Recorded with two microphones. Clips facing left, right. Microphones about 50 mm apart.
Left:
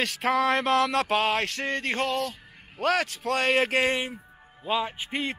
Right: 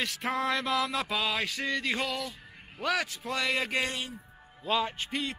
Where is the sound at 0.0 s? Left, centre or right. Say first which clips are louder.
Left 6 dB; left.